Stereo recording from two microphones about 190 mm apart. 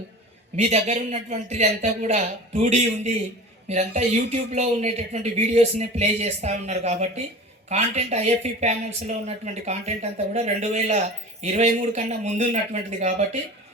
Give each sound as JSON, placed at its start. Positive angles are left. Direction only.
{"t": 0.5, "sound": "speech", "side_deg": -35}